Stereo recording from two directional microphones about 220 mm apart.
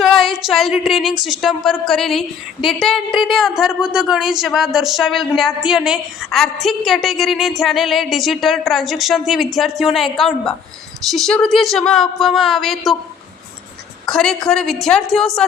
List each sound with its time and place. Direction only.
0.0 s a sound: centre (ahead or behind)
1.2 s a woman's voice: centre (ahead or behind)
14.1 s a woman's voice: 5° left (ahead or behind)